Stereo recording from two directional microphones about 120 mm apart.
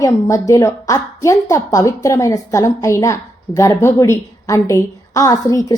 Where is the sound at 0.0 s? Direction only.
30° left (ahead or behind).